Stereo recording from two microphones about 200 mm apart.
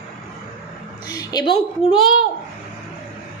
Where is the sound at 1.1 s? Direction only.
20° left (ahead or behind).